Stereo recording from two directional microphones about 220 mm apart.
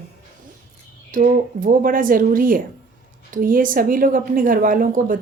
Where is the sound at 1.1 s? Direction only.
40° right (ahead or behind).